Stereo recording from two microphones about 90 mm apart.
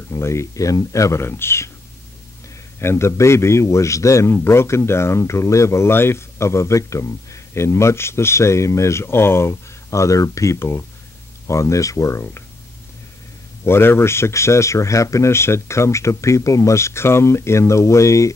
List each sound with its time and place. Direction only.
0.1 s speech: 30° left (ahead or behind)
2.8 s speech: 30° left (ahead or behind)
13.7 s speech: 25° left (ahead or behind)